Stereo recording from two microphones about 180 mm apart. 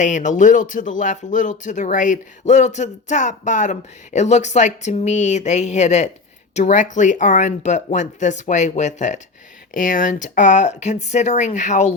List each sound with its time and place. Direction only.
0.0 s speech: 45° left (ahead or behind)